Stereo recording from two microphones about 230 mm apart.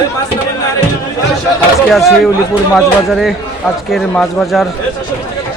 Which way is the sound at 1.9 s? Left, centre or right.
Centre.